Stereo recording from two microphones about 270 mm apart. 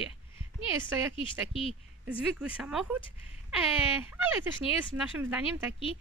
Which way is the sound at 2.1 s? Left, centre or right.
Centre.